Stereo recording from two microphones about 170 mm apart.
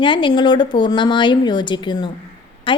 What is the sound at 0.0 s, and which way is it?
A woman's voice, 30° left (ahead or behind).